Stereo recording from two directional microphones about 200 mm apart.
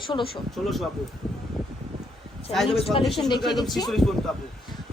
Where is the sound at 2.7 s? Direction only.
30° left (ahead or behind).